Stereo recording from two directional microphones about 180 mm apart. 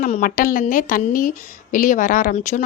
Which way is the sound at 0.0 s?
45° left (ahead or behind).